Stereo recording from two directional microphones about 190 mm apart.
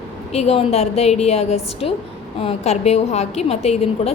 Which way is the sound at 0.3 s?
35° left (ahead or behind).